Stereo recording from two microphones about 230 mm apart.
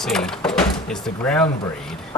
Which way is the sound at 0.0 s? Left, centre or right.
Centre.